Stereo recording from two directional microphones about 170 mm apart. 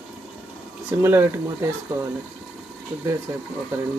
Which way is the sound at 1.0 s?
15° right (ahead or behind).